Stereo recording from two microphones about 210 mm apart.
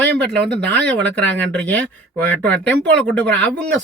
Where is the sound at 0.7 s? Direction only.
5° left (ahead or behind).